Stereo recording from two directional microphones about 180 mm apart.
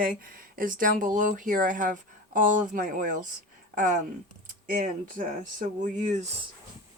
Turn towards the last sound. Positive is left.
turn(degrees=-40)  # may be behind; listen again after turning